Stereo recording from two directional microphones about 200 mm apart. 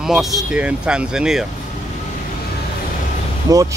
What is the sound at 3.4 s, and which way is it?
Vehicle, 15° right (ahead or behind).